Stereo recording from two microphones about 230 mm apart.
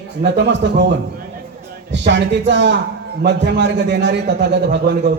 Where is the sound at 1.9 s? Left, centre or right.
Right.